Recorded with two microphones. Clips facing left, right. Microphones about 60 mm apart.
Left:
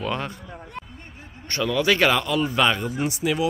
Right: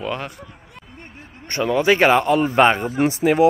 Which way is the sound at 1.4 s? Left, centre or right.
Right.